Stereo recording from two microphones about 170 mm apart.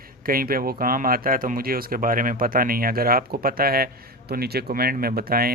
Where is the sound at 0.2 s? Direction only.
60° right (ahead or behind).